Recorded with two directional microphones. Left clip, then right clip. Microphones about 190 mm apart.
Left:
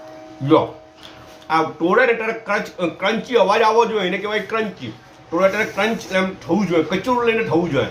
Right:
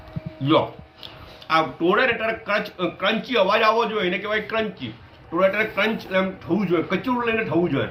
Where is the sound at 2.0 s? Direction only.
15° left (ahead or behind).